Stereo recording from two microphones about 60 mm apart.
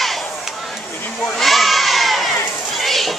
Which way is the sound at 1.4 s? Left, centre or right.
Centre.